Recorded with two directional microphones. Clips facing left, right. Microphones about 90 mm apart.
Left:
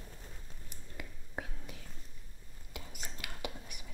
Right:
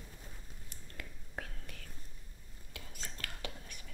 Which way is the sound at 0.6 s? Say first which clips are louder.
Left 2 dB; 15° left (ahead or behind).